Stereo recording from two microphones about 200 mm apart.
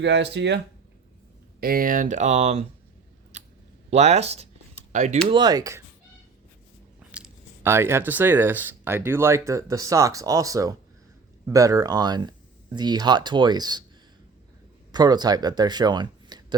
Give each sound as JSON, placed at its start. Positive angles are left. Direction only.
{"t": 0.0, "sound": "speech", "side_deg": -60}
{"t": 1.6, "sound": "speech", "side_deg": -45}
{"t": 3.3, "sound": "a sound", "side_deg": -35}
{"t": 3.8, "sound": "speech", "side_deg": -35}
{"t": 5.3, "sound": "speech", "side_deg": -20}
{"t": 7.1, "sound": "speech", "side_deg": -10}
{"t": 14.9, "sound": "speech", "side_deg": -20}